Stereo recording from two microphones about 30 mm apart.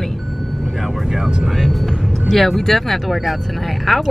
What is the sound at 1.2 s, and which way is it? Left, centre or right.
Speech, centre.